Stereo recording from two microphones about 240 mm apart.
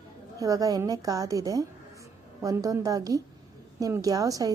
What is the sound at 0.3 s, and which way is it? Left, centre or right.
A woman's voice, centre.